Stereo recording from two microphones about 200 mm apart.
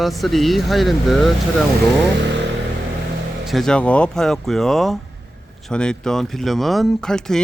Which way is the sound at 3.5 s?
Centre (ahead or behind).